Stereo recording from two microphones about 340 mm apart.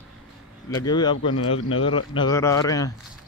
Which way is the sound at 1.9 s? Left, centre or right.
Centre.